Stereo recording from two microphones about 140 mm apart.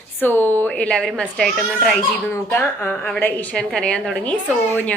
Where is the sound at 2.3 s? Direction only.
15° left (ahead or behind).